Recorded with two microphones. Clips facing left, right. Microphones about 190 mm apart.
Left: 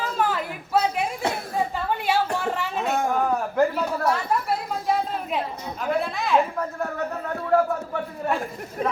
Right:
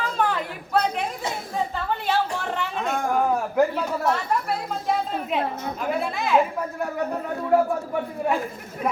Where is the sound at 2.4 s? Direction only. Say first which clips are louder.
Left 2 dB; 5° left (ahead or behind).